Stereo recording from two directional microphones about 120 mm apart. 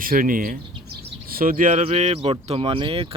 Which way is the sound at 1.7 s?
80° right.